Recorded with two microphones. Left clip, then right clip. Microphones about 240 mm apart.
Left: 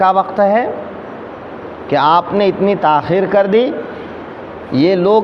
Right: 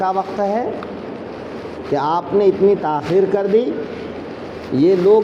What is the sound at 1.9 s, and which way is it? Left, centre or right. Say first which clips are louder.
Speech: left 6 dB; left.